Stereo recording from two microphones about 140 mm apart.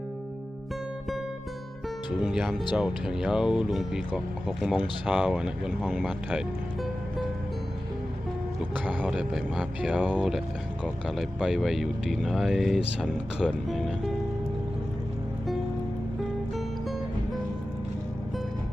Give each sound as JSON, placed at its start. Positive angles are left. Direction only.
{"t": 2.2, "sound": "speech", "side_deg": 0}
{"t": 8.7, "sound": "speech", "side_deg": -10}